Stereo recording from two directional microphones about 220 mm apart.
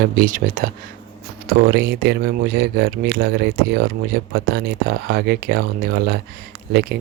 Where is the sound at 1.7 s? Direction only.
50° right (ahead or behind).